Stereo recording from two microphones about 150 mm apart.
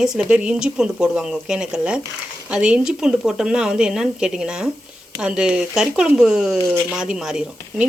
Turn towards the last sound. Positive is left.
turn(degrees=-5)  # may be behind; listen again after turning